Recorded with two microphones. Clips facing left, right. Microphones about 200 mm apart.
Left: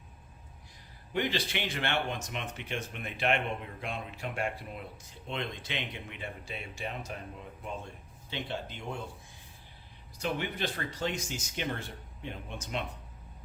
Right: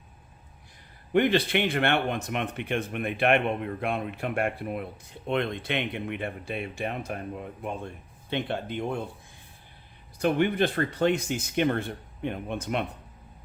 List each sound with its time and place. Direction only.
1.1 s speech: 55° right (ahead or behind)
10.2 s speech: 55° right (ahead or behind)